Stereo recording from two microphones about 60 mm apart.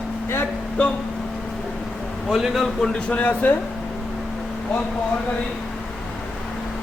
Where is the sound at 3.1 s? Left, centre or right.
Left.